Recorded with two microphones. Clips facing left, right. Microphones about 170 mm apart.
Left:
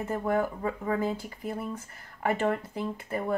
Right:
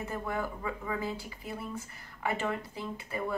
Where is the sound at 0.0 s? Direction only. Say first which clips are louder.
Left 7 dB; 50° left (ahead or behind).